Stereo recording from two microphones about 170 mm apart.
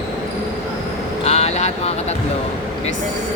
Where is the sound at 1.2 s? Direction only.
40° left (ahead or behind).